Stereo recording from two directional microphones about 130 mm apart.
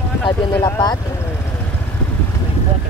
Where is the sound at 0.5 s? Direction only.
30° left (ahead or behind).